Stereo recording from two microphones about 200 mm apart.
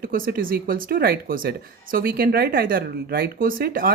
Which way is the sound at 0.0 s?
45° right (ahead or behind).